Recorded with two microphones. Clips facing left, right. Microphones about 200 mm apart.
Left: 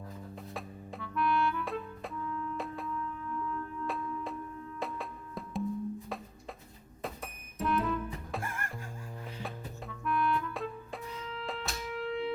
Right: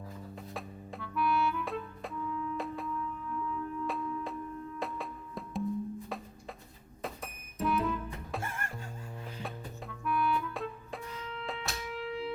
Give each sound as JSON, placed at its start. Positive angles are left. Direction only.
{"t": 0.3, "sound": "clarinet", "side_deg": 0}
{"t": 4.8, "sound": "music", "side_deg": 0}
{"t": 7.0, "sound": "music", "side_deg": 0}
{"t": 8.4, "sound": "music", "side_deg": -25}
{"t": 9.2, "sound": "music", "side_deg": 0}